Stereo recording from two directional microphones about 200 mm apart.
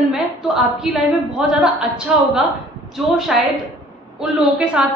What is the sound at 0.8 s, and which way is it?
A woman's voice, centre (ahead or behind).